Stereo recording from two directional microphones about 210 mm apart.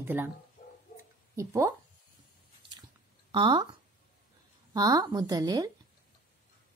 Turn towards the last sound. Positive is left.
turn(degrees=-20)  # may be behind; listen again after turning